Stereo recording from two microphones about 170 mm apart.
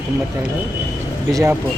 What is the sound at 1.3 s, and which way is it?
Speech, 20° right (ahead or behind).